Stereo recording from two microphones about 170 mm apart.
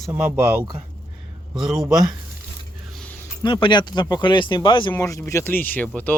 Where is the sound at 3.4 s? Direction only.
30° left (ahead or behind).